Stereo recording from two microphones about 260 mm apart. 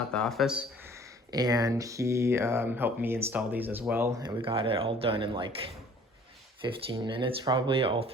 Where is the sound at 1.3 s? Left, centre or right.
Centre.